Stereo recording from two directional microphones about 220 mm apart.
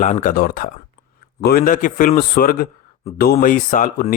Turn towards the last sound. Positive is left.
turn(degrees=35)  # may be behind; listen again after turning